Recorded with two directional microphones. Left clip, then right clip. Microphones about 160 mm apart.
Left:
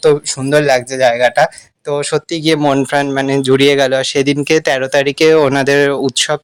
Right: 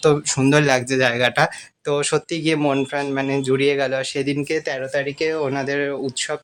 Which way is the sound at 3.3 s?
45° left (ahead or behind).